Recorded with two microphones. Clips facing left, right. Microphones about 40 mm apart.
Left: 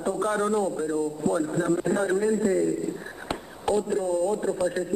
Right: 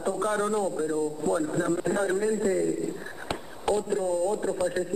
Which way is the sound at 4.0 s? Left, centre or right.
Left.